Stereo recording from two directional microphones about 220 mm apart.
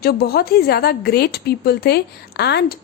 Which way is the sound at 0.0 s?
45° left (ahead or behind).